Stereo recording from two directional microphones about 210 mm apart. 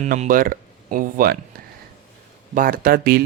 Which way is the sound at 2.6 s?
40° right (ahead or behind).